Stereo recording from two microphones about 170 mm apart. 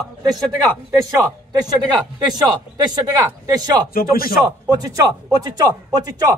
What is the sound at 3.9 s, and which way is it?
Speech, 60° left (ahead or behind).